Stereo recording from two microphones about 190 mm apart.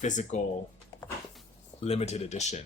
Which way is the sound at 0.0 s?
40° left (ahead or behind).